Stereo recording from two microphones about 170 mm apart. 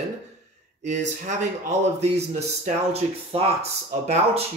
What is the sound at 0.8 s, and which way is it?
Speech, 45° right (ahead or behind).